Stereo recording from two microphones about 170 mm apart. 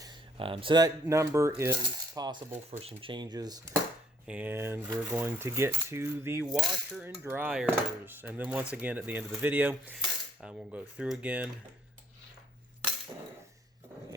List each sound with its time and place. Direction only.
0.0 s speech: 30° right (ahead or behind)
1.7 s coin: 25° right (ahead or behind)
2.5 s speech: 40° right (ahead or behind); by 3.8 s 20° right (ahead or behind)
4.3 s cutlery: 10° right (ahead or behind)
6.5 s cutlery: centre (ahead or behind)